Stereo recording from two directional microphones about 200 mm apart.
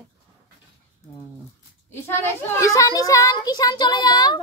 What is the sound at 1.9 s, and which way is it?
A child's voice, 10° left (ahead or behind).